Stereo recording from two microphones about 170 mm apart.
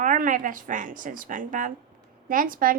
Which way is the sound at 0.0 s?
50° right (ahead or behind).